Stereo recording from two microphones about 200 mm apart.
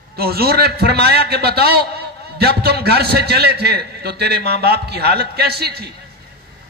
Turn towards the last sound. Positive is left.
turn(degrees=-50)  # may be behind; listen again after turning